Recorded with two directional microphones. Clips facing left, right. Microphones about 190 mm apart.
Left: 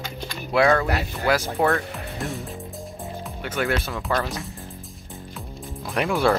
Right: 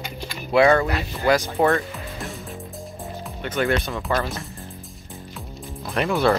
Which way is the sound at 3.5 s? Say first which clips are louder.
Right 3 dB; 5° left (ahead or behind).